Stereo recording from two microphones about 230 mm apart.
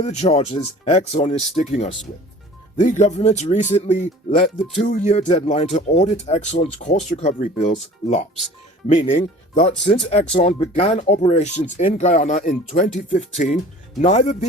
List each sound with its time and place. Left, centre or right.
0.0 s speech: left